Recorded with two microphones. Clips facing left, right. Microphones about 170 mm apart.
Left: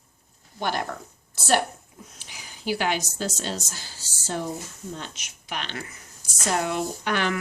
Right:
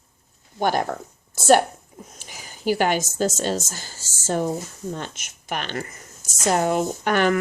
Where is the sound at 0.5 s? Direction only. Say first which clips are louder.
Right 6 dB; 45° right (ahead or behind).